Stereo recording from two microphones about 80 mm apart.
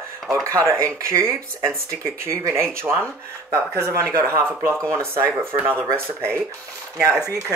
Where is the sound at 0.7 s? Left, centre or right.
Right.